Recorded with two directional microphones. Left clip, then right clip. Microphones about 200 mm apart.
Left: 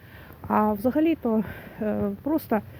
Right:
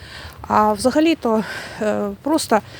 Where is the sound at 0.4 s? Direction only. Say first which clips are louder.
Right 8 dB; 30° right (ahead or behind).